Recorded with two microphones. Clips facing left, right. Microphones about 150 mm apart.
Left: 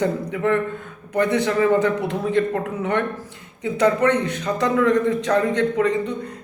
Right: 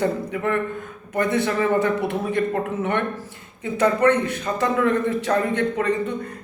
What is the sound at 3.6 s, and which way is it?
Speech, 15° left (ahead or behind).